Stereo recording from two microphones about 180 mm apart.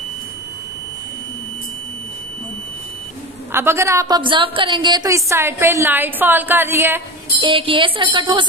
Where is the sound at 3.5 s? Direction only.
15° right (ahead or behind).